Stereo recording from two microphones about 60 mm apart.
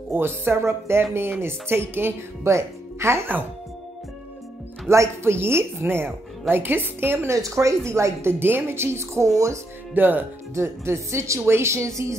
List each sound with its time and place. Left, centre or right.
0.1 s speech: right
4.8 s a woman's voice: right
7.2 s speech: right
9.9 s a woman's voice: right
10.5 s speech: right